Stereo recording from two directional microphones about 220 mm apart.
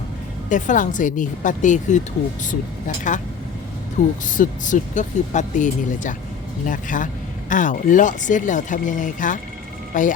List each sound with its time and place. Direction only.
0.5 s speech: 35° left (ahead or behind)
4.3 s speech: 35° left (ahead or behind)